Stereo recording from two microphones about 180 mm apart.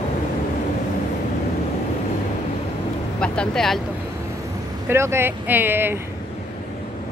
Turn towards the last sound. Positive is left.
turn(degrees=-10)  # may be behind; listen again after turning